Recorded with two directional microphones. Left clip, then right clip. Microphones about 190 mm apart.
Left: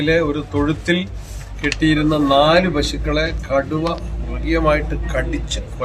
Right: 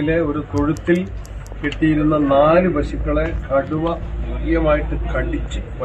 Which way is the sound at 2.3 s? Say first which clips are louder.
Even; 15° left (ahead or behind).